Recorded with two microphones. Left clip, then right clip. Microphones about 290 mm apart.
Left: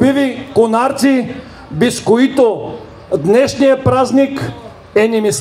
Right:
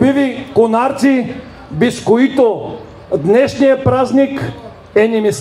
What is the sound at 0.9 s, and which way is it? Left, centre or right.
Speech, centre.